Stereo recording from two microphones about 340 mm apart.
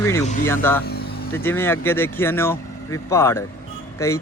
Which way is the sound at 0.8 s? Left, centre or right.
Left.